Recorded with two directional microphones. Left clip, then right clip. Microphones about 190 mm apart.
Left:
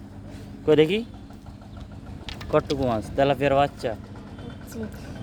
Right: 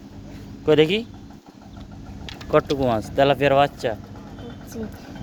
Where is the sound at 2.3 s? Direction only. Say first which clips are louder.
Right 4 dB; 5° right (ahead or behind).